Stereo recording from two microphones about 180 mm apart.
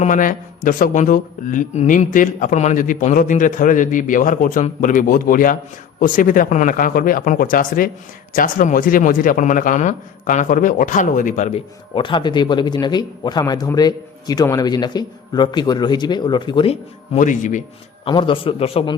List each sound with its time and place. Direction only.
0.0 s speech: 45° left (ahead or behind)
11.9 s speech: 25° left (ahead or behind); by 17.6 s 45° left (ahead or behind)
18.0 s speech: 30° left (ahead or behind)